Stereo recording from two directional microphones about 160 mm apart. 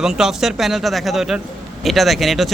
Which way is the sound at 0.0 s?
5° right (ahead or behind).